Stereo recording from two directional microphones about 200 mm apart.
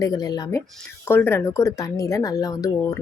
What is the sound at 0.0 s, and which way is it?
Speech, 20° left (ahead or behind).